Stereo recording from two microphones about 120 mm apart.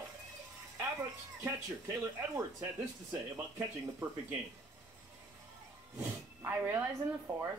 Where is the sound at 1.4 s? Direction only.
20° right (ahead or behind).